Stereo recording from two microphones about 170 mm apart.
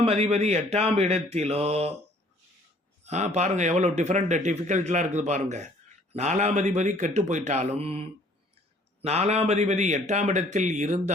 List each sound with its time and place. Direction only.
0.0 s speech: 35° right (ahead or behind)
3.0 s speech: 40° right (ahead or behind)